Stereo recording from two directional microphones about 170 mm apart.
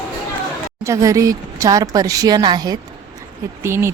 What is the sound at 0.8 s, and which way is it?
Speech, 20° right (ahead or behind).